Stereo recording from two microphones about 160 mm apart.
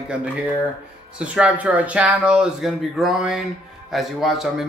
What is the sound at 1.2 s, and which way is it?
A man's voice, 5° right (ahead or behind).